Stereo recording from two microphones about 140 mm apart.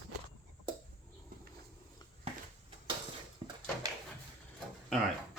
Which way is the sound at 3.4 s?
30° right (ahead or behind).